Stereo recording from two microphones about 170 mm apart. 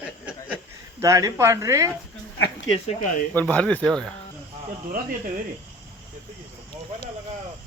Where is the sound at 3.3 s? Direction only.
10° left (ahead or behind).